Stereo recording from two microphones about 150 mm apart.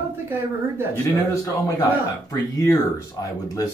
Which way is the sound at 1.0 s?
25° left (ahead or behind).